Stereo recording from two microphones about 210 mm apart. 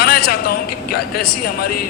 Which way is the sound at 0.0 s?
45° left (ahead or behind).